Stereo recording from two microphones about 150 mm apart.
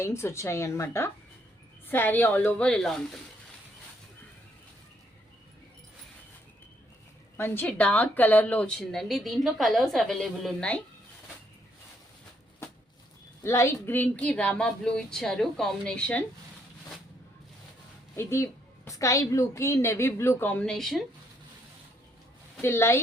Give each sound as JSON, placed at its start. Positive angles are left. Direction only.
{"t": 0.0, "sound": "speech", "side_deg": 20}
{"t": 7.3, "sound": "speech", "side_deg": 15}
{"t": 13.4, "sound": "speech", "side_deg": 20}
{"t": 18.2, "sound": "speech", "side_deg": 15}
{"t": 22.6, "sound": "speech", "side_deg": 15}